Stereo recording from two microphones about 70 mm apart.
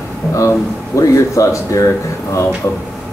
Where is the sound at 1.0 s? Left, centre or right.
Left.